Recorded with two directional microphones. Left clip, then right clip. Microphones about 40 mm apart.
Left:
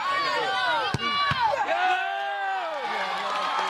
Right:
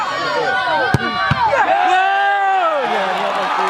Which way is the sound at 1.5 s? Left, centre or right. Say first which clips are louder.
Right 11 dB; right.